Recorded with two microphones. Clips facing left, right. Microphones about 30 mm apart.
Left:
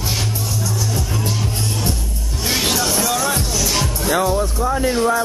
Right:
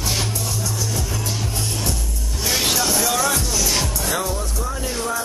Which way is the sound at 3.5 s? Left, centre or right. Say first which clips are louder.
Left 2 dB; centre.